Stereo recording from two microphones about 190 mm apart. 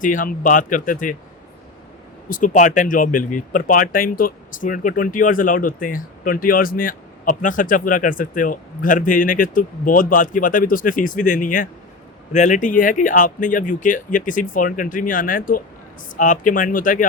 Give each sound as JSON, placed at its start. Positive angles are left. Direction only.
{"t": 0.0, "sound": "speech", "side_deg": 45}
{"t": 2.3, "sound": "speech", "side_deg": 40}